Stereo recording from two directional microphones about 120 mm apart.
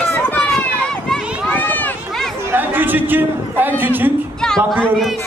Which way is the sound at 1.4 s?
15° left (ahead or behind).